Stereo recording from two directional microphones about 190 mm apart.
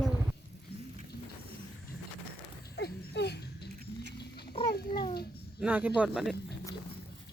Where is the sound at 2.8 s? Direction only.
60° left (ahead or behind).